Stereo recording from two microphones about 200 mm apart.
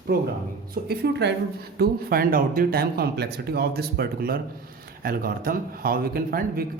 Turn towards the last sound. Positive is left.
turn(degrees=-50)  # may be behind; listen again after turning